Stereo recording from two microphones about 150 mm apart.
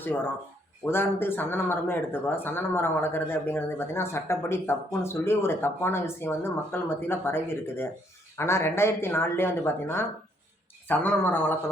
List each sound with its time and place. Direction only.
0.9 s speech: 15° left (ahead or behind)